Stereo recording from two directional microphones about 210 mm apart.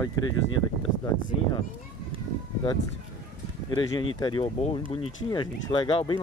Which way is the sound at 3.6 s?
20° left (ahead or behind).